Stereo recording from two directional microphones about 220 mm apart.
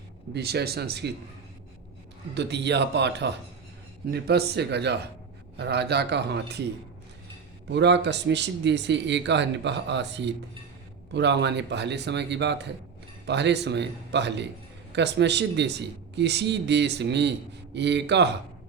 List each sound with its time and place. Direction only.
0.3 s speech: 45° right (ahead or behind)
2.3 s speech: 50° right (ahead or behind)
7.7 s speech: 50° right (ahead or behind)